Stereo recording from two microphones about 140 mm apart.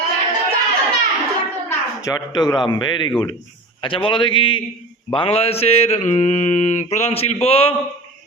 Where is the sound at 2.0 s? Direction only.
30° left (ahead or behind).